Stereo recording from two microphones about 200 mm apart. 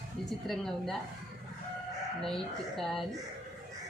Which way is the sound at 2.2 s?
Centre (ahead or behind).